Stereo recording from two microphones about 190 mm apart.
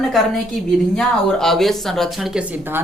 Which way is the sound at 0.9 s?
Centre (ahead or behind).